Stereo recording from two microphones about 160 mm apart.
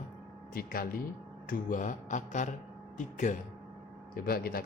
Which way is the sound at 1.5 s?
55° left (ahead or behind).